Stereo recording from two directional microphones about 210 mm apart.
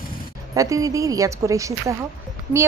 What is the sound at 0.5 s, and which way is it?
A woman's voice, 15° right (ahead or behind).